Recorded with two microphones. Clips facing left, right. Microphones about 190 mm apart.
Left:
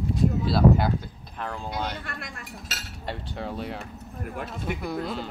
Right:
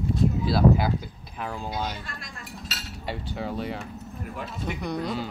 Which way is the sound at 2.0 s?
65° left (ahead or behind).